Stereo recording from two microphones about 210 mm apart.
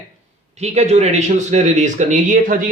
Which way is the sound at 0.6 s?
30° right (ahead or behind).